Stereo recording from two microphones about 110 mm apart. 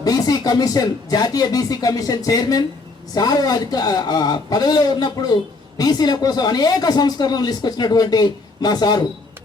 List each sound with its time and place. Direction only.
0.0 s a man's voice: 35° left (ahead or behind)